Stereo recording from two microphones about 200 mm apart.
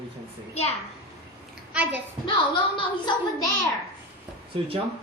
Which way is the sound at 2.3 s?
25° left (ahead or behind).